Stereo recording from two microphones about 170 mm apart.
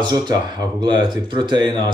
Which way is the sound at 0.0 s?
25° right (ahead or behind).